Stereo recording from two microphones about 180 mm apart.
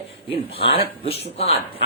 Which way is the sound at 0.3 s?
30° left (ahead or behind).